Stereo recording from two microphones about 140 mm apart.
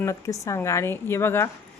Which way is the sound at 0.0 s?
20° left (ahead or behind).